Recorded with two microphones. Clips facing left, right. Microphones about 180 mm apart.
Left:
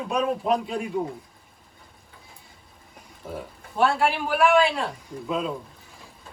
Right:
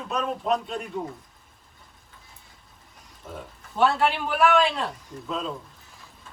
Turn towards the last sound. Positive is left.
turn(degrees=5)  # may be behind; listen again after turning